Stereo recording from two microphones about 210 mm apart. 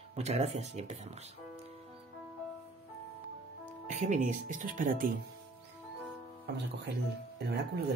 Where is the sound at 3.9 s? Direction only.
35° right (ahead or behind).